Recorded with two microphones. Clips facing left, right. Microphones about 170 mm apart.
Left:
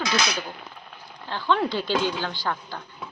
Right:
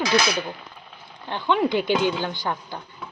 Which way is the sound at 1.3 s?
20° right (ahead or behind).